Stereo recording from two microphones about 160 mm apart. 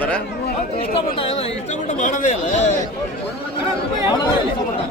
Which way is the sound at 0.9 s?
35° left (ahead or behind).